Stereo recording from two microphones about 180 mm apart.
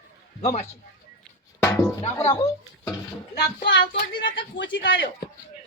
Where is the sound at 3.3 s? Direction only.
65° left (ahead or behind).